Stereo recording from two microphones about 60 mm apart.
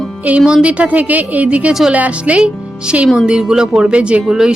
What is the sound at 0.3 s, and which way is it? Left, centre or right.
A woman's voice, right.